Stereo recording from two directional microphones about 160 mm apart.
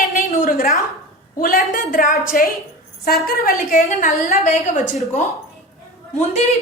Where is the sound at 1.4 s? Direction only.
65° left (ahead or behind).